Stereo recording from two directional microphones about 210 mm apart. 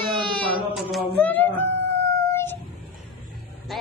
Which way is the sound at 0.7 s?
5° left (ahead or behind).